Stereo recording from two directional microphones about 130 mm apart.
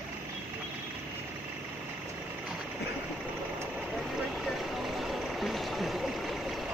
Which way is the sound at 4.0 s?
Centre (ahead or behind).